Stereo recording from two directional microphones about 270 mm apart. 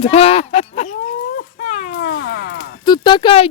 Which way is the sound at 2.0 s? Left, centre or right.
Left.